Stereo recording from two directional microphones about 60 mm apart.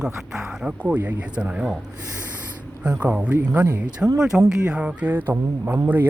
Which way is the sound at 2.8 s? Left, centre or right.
Right.